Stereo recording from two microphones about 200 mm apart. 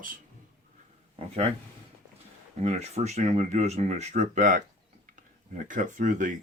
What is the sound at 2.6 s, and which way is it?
Speech, 35° right (ahead or behind).